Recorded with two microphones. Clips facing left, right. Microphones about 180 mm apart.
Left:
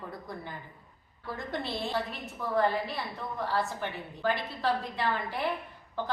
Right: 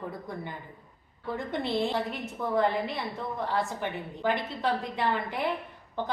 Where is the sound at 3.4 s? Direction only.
20° right (ahead or behind).